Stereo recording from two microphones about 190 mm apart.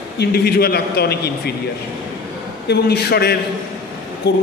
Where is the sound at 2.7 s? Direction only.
60° left (ahead or behind).